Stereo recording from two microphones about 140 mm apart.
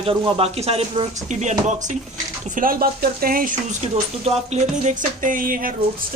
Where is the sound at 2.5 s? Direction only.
90° right.